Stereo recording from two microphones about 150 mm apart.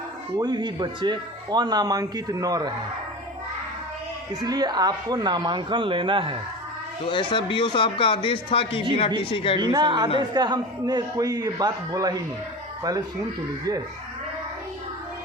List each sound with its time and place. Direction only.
0.3 s speech: 30° right (ahead or behind)
4.4 s speech: 25° right (ahead or behind)
7.0 s speech: 35° left (ahead or behind)
9.6 s speech: 30° right (ahead or behind)